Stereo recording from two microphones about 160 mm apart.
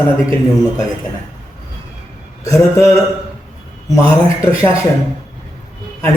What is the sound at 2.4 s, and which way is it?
Speech, 20° left (ahead or behind).